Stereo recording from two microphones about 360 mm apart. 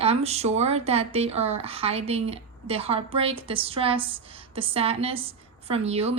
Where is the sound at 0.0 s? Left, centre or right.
Centre.